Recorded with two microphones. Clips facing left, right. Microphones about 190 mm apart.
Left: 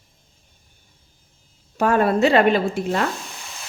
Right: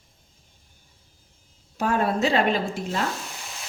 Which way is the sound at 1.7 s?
65° left (ahead or behind).